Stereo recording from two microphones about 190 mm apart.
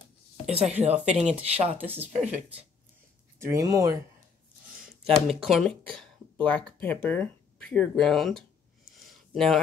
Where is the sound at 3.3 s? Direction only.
15° right (ahead or behind).